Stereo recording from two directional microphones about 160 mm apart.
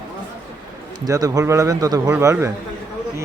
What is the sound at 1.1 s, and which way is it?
A man's voice, 20° right (ahead or behind).